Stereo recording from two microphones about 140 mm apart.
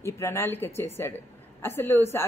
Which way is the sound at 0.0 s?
20° left (ahead or behind).